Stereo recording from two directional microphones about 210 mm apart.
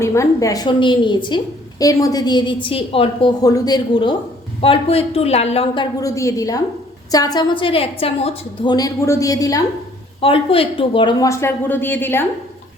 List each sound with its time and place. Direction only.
0.0 s a woman's voice: 15° left (ahead or behind)